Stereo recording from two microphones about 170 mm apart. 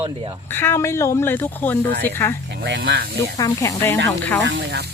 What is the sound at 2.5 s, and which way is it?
Speech, 90° right.